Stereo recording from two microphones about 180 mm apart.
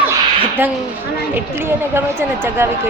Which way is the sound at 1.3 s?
15° right (ahead or behind).